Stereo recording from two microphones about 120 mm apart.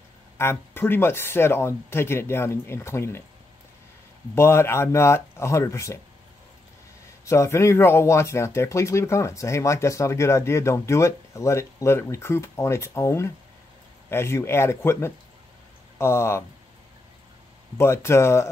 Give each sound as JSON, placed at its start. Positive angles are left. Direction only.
{"t": 0.4, "sound": "speech", "side_deg": 20}
{"t": 4.4, "sound": "speech", "side_deg": 20}
{"t": 7.2, "sound": "speech", "side_deg": 25}
{"t": 17.7, "sound": "speech", "side_deg": 20}